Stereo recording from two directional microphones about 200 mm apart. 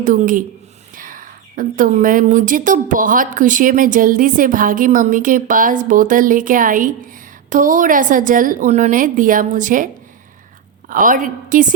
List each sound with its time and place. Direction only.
0.0 s a woman's voice: 40° right (ahead or behind)